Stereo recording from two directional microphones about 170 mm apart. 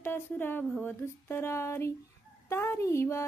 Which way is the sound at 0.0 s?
10° left (ahead or behind).